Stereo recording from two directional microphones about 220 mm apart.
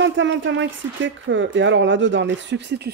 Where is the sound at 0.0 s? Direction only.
55° right (ahead or behind).